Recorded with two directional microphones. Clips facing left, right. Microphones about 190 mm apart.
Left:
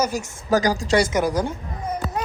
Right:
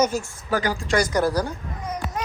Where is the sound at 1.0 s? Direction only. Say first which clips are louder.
Left 1 dB; 20° left (ahead or behind).